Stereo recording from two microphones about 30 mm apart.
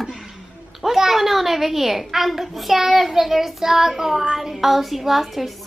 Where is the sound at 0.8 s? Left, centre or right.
Centre.